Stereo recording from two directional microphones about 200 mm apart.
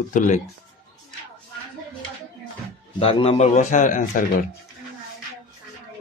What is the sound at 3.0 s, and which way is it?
Speech, 30° left (ahead or behind).